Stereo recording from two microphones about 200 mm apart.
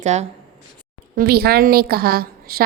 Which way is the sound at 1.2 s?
50° right (ahead or behind).